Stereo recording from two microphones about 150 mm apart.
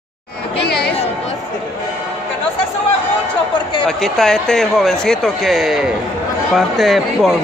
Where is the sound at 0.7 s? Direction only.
90° left.